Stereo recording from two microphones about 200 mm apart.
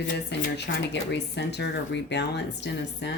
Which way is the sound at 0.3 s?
55° left (ahead or behind).